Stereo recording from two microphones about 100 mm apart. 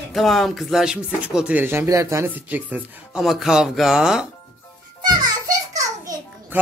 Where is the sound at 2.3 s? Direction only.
15° right (ahead or behind).